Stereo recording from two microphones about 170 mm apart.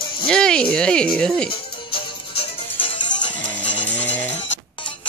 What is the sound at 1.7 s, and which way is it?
Music, 30° left (ahead or behind).